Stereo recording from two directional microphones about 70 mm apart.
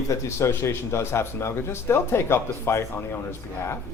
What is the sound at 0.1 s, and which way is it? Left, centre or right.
A man's voice, left.